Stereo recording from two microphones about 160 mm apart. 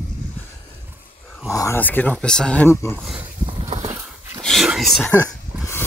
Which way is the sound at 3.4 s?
40° right (ahead or behind).